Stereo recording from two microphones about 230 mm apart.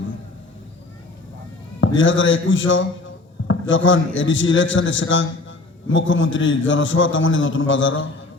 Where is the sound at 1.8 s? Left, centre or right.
Left.